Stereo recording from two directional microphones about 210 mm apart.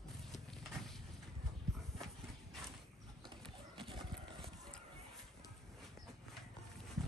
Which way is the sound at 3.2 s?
25° right (ahead or behind).